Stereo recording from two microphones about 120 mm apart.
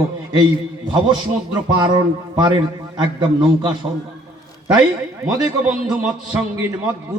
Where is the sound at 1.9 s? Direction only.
40° right (ahead or behind).